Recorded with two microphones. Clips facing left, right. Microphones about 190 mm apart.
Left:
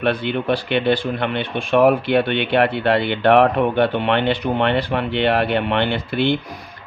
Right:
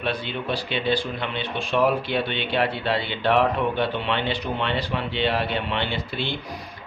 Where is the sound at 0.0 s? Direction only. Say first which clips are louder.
Left 8 dB; 60° left (ahead or behind).